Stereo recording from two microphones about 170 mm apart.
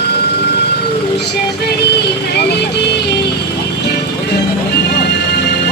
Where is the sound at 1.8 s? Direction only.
75° left (ahead or behind).